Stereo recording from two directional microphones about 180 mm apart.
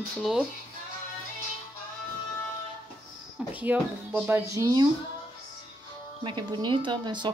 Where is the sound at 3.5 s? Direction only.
10° right (ahead or behind).